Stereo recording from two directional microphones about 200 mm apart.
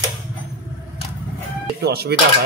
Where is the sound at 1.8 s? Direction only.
55° right (ahead or behind).